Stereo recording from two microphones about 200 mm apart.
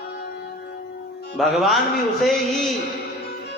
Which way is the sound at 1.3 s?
Centre (ahead or behind).